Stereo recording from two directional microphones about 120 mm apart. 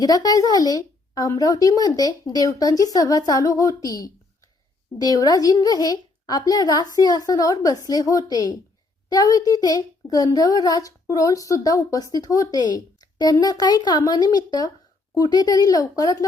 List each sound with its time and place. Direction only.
0.0 s speech: 30° left (ahead or behind)